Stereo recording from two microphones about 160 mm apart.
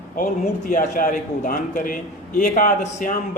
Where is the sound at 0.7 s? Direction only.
55° left (ahead or behind).